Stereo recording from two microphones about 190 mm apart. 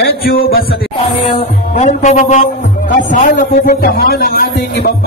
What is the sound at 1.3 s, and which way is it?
Music, 40° left (ahead or behind).